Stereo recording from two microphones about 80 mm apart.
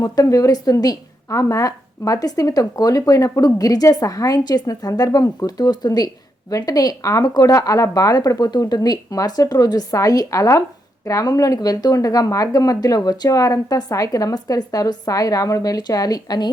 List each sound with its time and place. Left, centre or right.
0.0 s a woman's voice: left